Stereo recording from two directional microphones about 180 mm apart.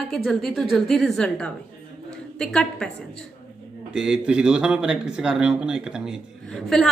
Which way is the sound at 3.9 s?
5° right (ahead or behind).